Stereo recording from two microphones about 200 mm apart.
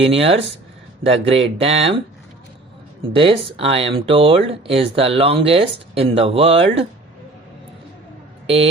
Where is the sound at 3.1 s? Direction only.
25° right (ahead or behind).